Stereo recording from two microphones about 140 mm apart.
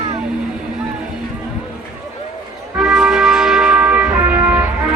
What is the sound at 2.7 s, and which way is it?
Music, 5° right (ahead or behind).